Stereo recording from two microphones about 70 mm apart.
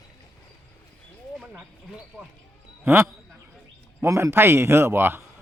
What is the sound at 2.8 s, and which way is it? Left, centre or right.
Speech, right.